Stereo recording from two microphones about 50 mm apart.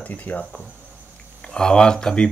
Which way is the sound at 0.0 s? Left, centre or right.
Left.